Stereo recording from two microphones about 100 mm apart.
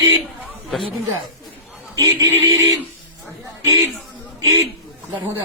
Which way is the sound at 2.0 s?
35° right (ahead or behind).